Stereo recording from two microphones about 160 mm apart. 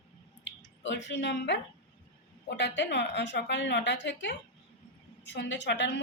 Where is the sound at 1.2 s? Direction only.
90° left.